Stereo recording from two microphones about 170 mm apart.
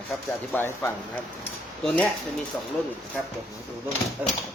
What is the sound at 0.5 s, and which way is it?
Speech, 15° left (ahead or behind).